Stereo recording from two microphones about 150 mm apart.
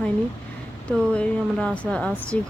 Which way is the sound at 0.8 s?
5° left (ahead or behind).